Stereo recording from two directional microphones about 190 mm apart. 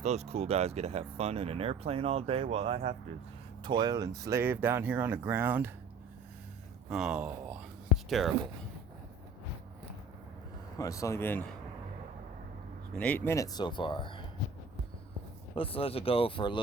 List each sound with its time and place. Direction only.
0.0 s speech: 35° right (ahead or behind)
3.6 s speech: 25° right (ahead or behind)
6.9 s speech: 5° right (ahead or behind)
10.8 s speech: 15° left (ahead or behind)
13.0 s speech: 10° left (ahead or behind); by 14.3 s 25° left (ahead or behind)
15.5 s speech: 30° left (ahead or behind)